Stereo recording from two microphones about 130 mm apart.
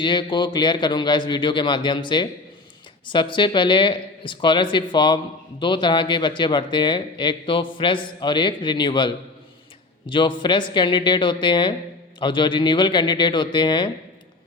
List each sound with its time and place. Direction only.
0.0 s a man's voice: 35° left (ahead or behind)